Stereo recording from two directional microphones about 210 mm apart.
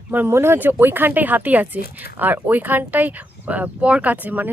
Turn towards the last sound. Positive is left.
turn(degrees=-10)  # may be behind; listen again after turning